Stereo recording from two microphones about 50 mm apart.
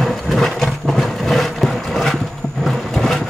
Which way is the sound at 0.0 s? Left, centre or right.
Centre.